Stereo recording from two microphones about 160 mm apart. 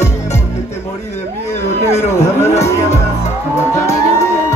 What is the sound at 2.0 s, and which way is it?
Speech, 45° left (ahead or behind).